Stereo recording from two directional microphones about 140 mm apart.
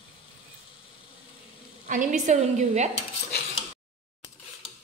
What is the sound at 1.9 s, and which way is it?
A woman's voice, 65° right (ahead or behind).